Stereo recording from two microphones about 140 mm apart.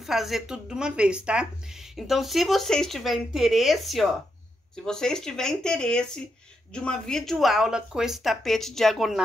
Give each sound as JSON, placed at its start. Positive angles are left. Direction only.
{"t": 0.0, "sound": "speech", "side_deg": 0}